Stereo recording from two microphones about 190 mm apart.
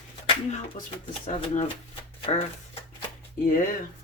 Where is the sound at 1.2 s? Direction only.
40° left (ahead or behind).